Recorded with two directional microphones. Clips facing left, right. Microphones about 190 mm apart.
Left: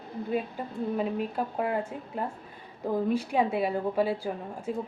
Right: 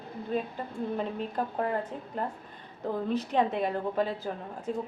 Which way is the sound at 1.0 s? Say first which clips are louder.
Left 4 dB; 10° left (ahead or behind).